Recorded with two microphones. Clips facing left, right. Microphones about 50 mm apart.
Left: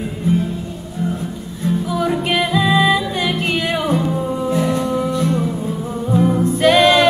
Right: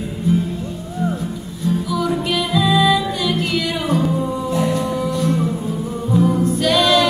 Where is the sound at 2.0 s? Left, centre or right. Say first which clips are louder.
Left 2 dB; left.